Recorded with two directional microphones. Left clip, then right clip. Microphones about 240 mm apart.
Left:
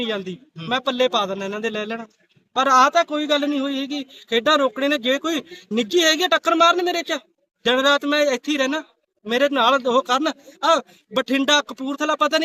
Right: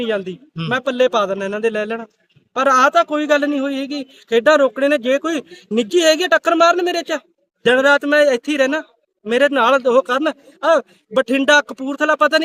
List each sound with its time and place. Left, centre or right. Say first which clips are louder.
0.7 s a man's voice: right 4 dB; centre